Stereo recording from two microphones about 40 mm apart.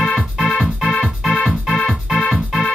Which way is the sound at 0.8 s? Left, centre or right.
Centre.